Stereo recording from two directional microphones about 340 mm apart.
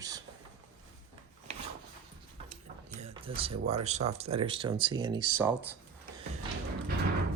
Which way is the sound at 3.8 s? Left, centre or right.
Centre.